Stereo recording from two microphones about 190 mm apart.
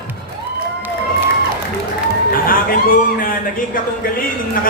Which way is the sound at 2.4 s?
50° left (ahead or behind).